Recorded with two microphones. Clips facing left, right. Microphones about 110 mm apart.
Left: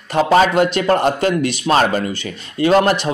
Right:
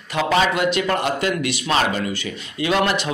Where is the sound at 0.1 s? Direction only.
40° left (ahead or behind).